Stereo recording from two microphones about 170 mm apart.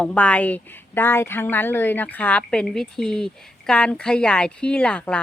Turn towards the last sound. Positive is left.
turn(degrees=5)  # may be behind; listen again after turning